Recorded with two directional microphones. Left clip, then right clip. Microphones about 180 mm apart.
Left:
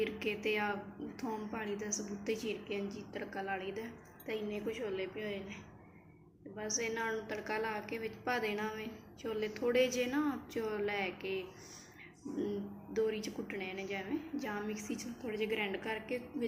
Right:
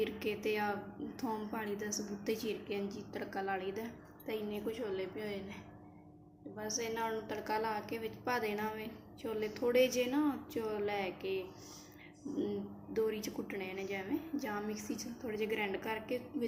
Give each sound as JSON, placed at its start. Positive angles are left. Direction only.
{"t": 0.0, "sound": "a woman's voice", "side_deg": -5}
{"t": 6.6, "sound": "a woman's voice", "side_deg": -5}